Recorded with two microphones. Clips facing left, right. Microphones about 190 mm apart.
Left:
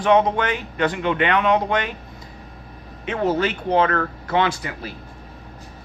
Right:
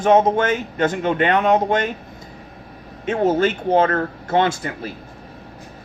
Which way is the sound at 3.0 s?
45° right (ahead or behind).